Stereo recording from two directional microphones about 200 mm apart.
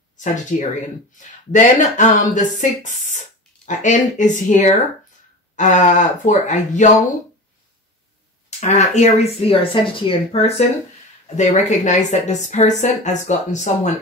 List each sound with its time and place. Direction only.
0.2 s speech: 40° left (ahead or behind)
8.5 s speech: 35° left (ahead or behind)
11.3 s speech: 35° left (ahead or behind)